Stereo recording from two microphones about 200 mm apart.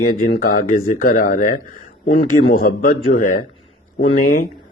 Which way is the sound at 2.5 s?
45° left (ahead or behind).